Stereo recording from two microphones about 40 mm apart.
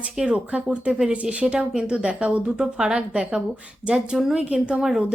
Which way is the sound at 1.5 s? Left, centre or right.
Right.